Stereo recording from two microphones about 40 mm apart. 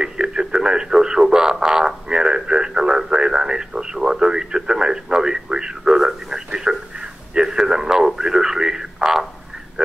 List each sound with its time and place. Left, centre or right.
0.0 s radio: centre